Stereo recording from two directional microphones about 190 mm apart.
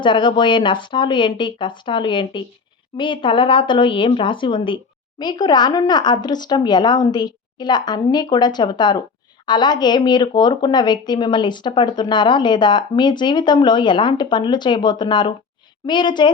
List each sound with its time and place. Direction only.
0.0 s speech: 25° left (ahead or behind)